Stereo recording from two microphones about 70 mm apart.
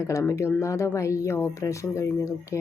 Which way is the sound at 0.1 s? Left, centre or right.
Left.